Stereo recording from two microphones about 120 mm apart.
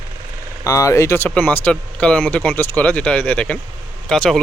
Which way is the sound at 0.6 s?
30° left (ahead or behind).